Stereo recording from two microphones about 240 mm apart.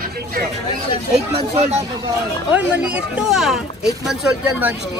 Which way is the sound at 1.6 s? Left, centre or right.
Right.